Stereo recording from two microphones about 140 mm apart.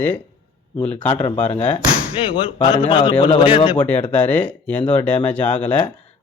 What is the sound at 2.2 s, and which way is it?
A man's voice, 35° left (ahead or behind).